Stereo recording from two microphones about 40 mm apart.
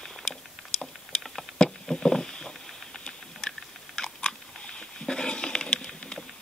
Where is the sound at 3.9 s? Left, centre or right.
Centre.